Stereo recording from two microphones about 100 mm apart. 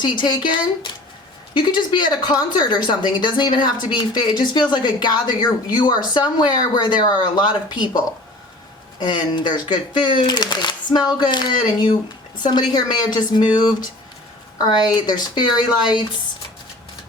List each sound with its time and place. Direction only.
0.0 s speech: 50° left (ahead or behind)
9.0 s speech: 50° left (ahead or behind)